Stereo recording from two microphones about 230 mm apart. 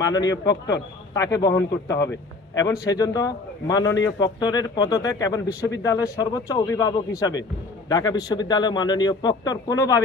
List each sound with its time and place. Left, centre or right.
0.0 s a man's voice: centre